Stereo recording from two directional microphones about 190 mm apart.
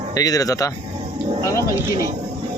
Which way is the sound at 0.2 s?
20° left (ahead or behind).